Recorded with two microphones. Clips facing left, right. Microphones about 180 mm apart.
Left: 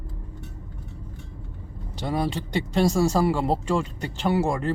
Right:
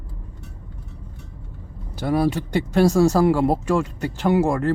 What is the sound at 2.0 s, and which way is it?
Speech, 5° left (ahead or behind).